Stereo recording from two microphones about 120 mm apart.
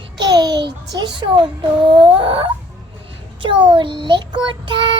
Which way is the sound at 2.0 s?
50° right (ahead or behind).